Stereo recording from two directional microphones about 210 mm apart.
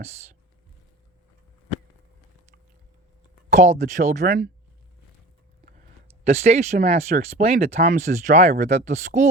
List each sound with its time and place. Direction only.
3.5 s speech: 35° right (ahead or behind)
6.2 s speech: 30° right (ahead or behind)